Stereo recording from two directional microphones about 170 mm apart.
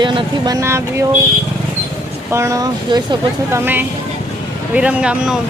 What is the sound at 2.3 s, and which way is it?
Speech, 15° right (ahead or behind).